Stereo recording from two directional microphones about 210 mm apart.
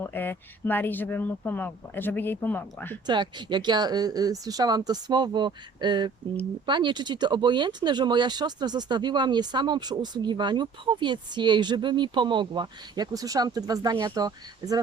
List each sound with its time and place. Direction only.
0.0 s speech: 10° left (ahead or behind)
3.1 s speech: 20° right (ahead or behind)